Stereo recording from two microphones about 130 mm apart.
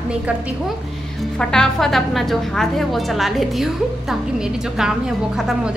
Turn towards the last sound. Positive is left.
turn(degrees=-5)  # may be behind; listen again after turning